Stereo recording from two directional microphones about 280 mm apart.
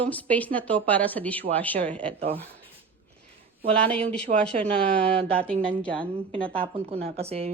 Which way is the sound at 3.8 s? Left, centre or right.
Centre.